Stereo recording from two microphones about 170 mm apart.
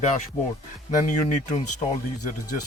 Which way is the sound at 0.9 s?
45° left (ahead or behind).